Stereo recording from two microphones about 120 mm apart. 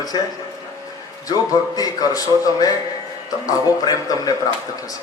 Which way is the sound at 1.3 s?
30° left (ahead or behind).